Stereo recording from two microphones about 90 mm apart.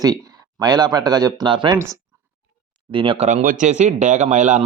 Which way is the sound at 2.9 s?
75° right (ahead or behind).